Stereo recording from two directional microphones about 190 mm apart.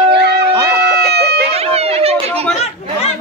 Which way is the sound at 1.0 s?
60° right (ahead or behind).